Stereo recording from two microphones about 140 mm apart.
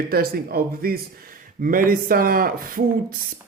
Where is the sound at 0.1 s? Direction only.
90° right.